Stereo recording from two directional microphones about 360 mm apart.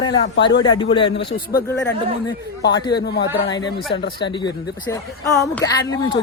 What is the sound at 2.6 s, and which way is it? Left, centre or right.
Speech, left.